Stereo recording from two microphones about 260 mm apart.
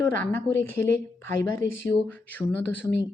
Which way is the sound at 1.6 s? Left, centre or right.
Left.